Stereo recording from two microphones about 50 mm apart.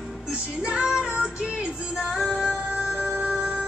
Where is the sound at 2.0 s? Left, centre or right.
Centre.